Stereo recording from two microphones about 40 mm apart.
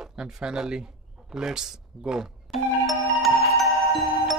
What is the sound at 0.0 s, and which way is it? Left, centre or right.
Speech, centre.